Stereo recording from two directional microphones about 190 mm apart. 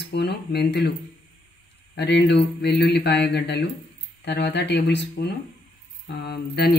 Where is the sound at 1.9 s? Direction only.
65° left (ahead or behind).